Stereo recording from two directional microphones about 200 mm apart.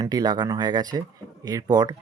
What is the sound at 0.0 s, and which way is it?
Speech, 20° right (ahead or behind).